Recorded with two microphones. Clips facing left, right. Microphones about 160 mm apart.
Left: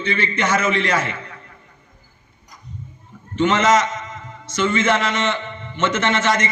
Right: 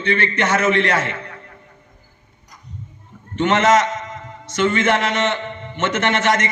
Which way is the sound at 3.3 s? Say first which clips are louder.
Right 1 dB; 65° right (ahead or behind).